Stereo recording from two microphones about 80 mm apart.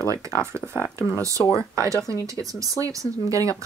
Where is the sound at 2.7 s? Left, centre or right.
Right.